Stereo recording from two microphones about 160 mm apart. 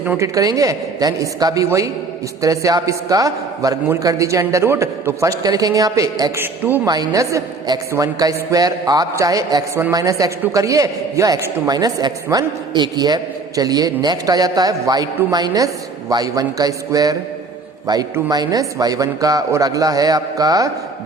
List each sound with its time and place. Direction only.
0.0 s a woman's voice: 10° right (ahead or behind)
0.3 s a man's voice: 20° right (ahead or behind)
6.8 s a man's voice: 25° right (ahead or behind)